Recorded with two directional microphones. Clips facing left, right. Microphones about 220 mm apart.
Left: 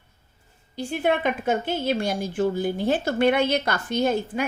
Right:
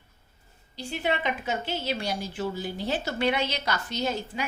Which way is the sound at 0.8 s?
50° left (ahead or behind).